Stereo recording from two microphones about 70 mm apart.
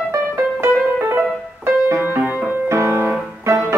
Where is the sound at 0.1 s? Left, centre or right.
Right.